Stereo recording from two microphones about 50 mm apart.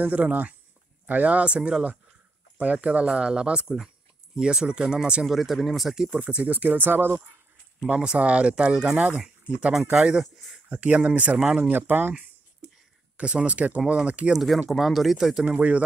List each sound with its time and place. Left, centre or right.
0.0 s speech: right
5.2 s speech: centre
6.1 s speech: right
7.9 s speech: right
10.2 s speech: centre
10.7 s speech: right
11.7 s speech: right
13.2 s speech: right
14.3 s speech: centre
15.5 s speech: right